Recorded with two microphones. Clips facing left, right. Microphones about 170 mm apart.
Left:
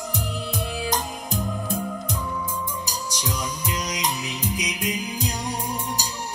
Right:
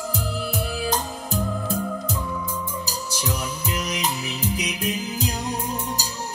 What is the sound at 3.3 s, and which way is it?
Music, 25° right (ahead or behind).